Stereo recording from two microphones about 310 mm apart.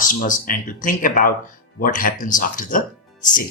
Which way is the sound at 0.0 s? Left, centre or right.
Left.